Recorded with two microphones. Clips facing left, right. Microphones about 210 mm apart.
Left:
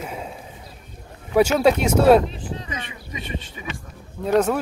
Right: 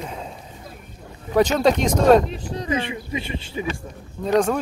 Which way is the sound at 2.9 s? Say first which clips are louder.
Right 4 dB; 30° right (ahead or behind).